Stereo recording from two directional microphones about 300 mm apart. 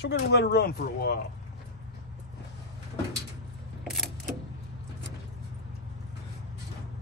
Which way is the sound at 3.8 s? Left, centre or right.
Centre.